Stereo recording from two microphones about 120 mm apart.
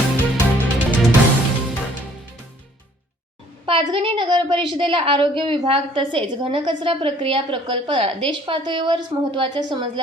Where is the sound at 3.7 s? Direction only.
45° right (ahead or behind).